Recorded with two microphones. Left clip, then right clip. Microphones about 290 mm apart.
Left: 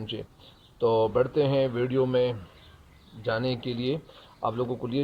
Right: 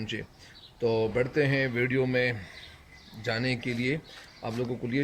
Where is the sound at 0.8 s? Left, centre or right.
Left.